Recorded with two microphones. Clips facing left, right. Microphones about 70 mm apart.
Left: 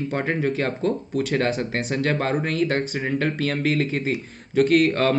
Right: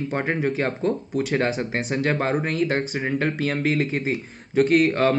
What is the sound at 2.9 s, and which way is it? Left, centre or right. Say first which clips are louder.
Speech: even; centre.